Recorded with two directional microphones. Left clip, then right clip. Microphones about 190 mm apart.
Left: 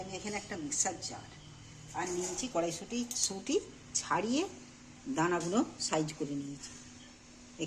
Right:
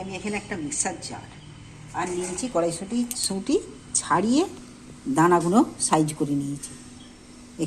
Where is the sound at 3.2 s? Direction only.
35° right (ahead or behind).